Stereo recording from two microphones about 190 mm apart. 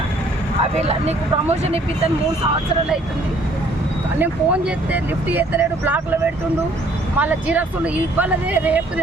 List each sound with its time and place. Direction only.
0.8 s speech: 35° right (ahead or behind)
4.2 s speech: 5° right (ahead or behind)
7.2 s speech: 10° right (ahead or behind)